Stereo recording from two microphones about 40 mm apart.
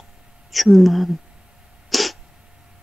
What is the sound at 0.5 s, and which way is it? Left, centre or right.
Speech, centre.